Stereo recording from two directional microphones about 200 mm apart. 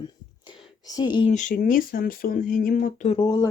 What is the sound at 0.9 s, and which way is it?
Speech, 20° left (ahead or behind).